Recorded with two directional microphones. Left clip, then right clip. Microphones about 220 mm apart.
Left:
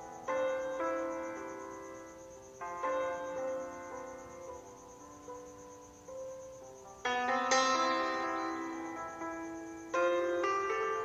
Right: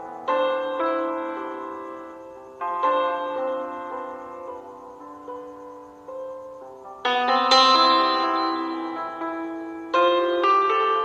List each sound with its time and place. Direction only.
0.2 s music: 25° right (ahead or behind)
7.0 s music: 25° right (ahead or behind)